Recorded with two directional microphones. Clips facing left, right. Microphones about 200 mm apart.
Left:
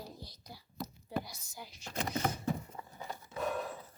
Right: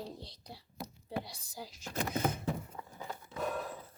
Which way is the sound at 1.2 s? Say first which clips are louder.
Right 3 dB; 35° right (ahead or behind).